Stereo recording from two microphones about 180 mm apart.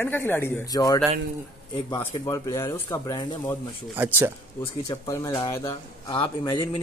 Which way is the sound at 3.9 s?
10° right (ahead or behind).